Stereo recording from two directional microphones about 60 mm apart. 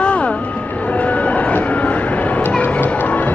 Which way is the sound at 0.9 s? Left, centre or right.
Left.